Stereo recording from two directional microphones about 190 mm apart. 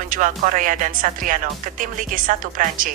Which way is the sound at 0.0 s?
45° right (ahead or behind).